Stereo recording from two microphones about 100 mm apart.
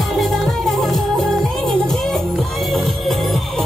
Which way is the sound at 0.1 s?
Centre (ahead or behind).